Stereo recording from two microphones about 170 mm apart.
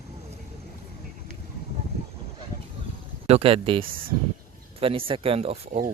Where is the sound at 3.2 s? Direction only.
35° right (ahead or behind).